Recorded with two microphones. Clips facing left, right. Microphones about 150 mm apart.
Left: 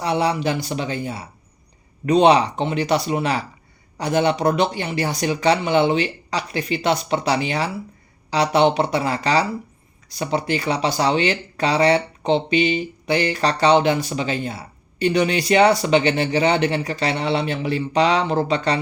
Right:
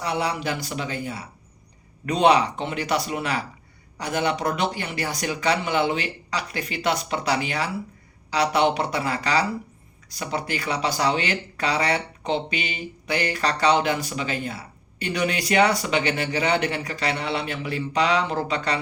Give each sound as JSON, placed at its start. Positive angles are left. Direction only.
{"t": 0.0, "sound": "speech", "side_deg": 25}